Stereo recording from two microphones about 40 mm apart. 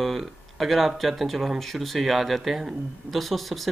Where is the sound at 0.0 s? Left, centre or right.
Centre.